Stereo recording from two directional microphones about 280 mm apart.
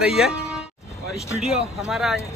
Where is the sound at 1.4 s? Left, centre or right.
Centre.